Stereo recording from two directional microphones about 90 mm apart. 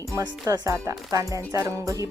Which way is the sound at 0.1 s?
45° right (ahead or behind).